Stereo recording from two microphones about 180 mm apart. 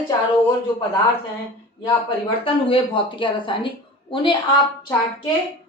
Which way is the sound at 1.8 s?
30° left (ahead or behind).